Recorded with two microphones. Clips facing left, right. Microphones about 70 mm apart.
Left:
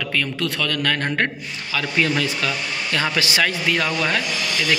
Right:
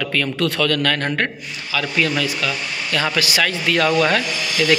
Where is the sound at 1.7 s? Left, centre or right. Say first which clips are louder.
Right 1 dB; left.